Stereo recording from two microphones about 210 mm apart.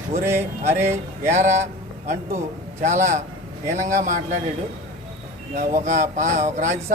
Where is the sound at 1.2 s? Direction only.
35° right (ahead or behind).